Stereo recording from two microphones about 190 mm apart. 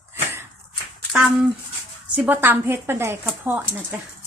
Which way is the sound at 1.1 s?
5° right (ahead or behind).